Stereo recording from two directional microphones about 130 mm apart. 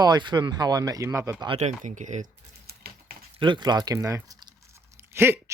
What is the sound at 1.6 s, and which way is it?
Speech, 65° right (ahead or behind).